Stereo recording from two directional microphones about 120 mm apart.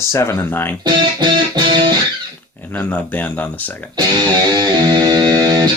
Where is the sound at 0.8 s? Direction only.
40° right (ahead or behind).